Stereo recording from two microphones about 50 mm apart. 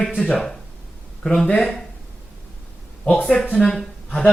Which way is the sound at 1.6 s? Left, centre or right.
Centre.